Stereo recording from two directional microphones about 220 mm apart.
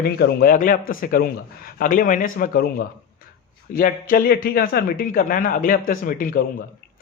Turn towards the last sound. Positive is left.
turn(degrees=40)  # may be behind; listen again after turning